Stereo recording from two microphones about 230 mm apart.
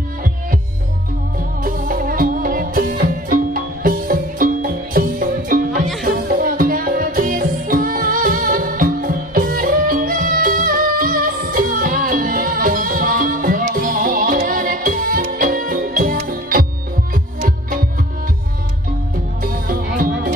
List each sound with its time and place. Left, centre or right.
1.6 s music: right
19.4 s music: right